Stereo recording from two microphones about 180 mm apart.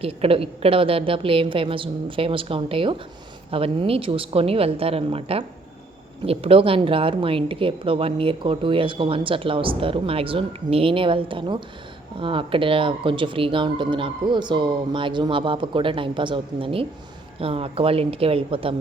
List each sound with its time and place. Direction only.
0.0 s a woman's voice: 30° right (ahead or behind)